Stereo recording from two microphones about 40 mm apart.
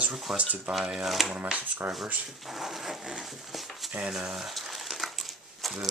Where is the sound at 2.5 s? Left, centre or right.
Centre.